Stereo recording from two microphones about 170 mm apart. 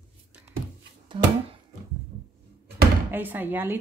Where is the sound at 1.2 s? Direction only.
35° right (ahead or behind).